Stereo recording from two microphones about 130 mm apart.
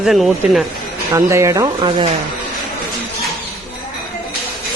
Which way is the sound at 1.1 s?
20° right (ahead or behind).